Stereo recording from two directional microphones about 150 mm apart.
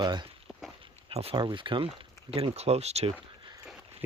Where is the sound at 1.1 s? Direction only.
40° right (ahead or behind).